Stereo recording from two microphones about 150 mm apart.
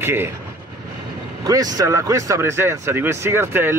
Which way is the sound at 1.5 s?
25° right (ahead or behind).